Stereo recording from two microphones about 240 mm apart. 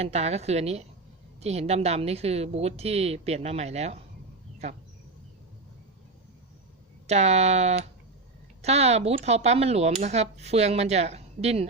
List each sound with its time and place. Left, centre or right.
0.0 s speech: right
7.1 s speech: right